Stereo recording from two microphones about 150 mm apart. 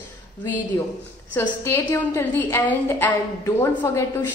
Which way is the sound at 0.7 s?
20° left (ahead or behind).